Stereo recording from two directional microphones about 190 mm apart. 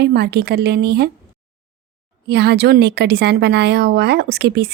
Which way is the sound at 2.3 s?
60° right (ahead or behind).